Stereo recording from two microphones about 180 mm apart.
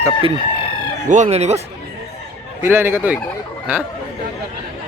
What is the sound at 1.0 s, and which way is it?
Speech, 45° right (ahead or behind).